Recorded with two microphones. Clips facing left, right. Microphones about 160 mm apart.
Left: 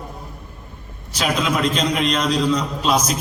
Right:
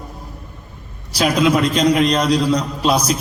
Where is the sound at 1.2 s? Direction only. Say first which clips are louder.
Right 5 dB; 35° right (ahead or behind).